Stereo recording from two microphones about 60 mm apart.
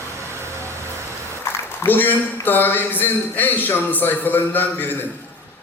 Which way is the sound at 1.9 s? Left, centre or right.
Left.